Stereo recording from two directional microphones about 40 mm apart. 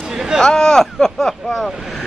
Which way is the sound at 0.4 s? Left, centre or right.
Centre.